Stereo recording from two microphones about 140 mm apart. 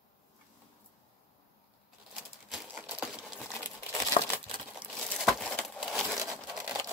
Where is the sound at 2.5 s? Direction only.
10° right (ahead or behind).